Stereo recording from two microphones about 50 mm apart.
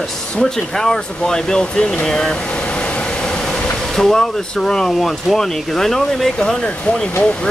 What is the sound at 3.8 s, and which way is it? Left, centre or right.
Speech, centre.